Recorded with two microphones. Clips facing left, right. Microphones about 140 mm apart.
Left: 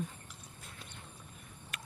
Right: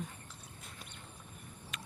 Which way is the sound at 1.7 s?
5° left (ahead or behind).